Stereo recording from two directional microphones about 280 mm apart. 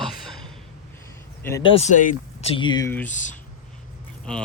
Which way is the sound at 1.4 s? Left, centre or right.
Centre.